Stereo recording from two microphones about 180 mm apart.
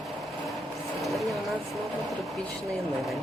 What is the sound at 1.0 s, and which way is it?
Vehicle, centre (ahead or behind).